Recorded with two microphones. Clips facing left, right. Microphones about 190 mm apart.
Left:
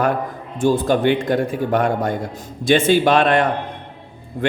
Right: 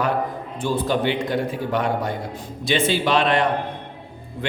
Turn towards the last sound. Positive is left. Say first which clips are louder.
# left 7 dB
turn(degrees=50)  # may be behind; listen again after turning